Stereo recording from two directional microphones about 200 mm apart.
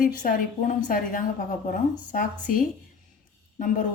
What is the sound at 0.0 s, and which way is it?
A woman's voice, 45° left (ahead or behind).